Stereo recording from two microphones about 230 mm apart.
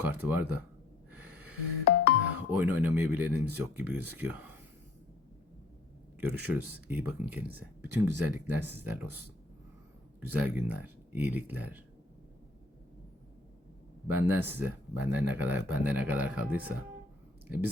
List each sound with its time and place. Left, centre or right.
0.0 s speech: centre
1.1 s snort: centre
1.8 s music: left
2.3 s speech: centre
6.1 s speech: centre
10.2 s speech: centre
14.1 s speech: centre